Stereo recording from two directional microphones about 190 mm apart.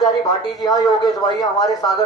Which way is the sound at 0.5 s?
20° left (ahead or behind).